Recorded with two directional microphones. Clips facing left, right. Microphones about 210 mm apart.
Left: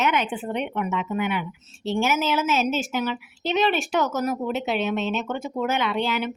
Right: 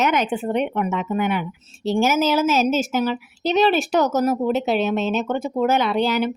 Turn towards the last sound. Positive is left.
turn(degrees=-40)  # may be behind; listen again after turning